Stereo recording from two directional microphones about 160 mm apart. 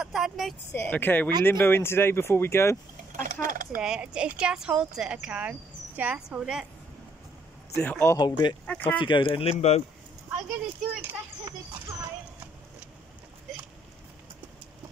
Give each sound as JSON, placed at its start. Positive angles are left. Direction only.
{"t": 0.0, "sound": "a woman's voice", "side_deg": -5}
{"t": 0.7, "sound": "speech", "side_deg": 10}
{"t": 3.1, "sound": "speech", "side_deg": -60}
{"t": 3.8, "sound": "speech", "side_deg": -5}
{"t": 7.8, "sound": "speech", "side_deg": 10}
{"t": 8.2, "sound": "speech", "side_deg": 25}
{"t": 8.6, "sound": "speech", "side_deg": 10}
{"t": 9.0, "sound": "speech", "side_deg": 30}
{"t": 11.0, "sound": "speech", "side_deg": -10}